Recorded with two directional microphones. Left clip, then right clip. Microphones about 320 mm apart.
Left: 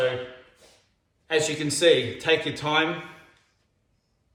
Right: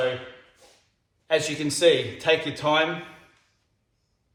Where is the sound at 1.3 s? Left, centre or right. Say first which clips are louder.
Even; centre.